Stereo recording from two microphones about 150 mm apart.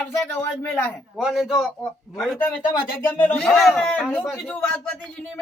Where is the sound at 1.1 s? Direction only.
5° right (ahead or behind).